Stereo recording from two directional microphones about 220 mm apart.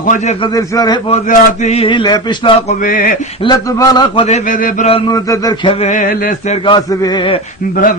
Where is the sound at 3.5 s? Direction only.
20° left (ahead or behind).